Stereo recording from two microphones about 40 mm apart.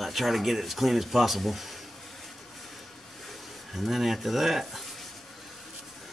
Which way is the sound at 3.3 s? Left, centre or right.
Centre.